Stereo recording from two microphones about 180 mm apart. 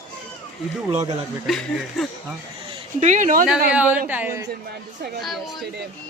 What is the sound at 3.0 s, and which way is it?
Speech, 45° right (ahead or behind).